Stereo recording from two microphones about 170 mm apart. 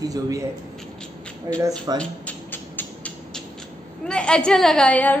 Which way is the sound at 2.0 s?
10° left (ahead or behind).